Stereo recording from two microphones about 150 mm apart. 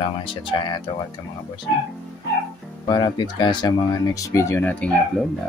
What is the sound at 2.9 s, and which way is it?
Speech, 30° left (ahead or behind).